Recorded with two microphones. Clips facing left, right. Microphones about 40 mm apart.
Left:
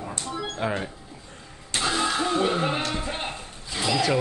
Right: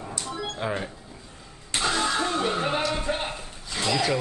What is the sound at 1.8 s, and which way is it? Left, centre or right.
Vehicle, centre.